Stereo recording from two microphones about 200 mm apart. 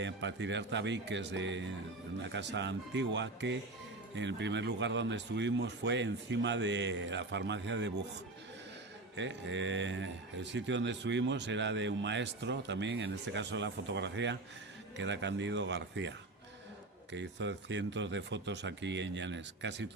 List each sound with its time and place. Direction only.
0.0 s a man's voice: 65° right (ahead or behind)
9.1 s a man's voice: 65° right (ahead or behind)